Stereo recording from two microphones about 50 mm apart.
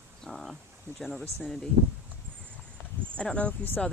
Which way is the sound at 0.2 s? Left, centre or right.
Centre.